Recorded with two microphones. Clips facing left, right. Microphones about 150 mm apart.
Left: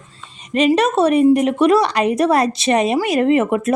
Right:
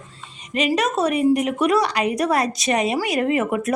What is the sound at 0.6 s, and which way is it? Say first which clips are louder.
A woman's voice: left 6 dB; 30° left (ahead or behind).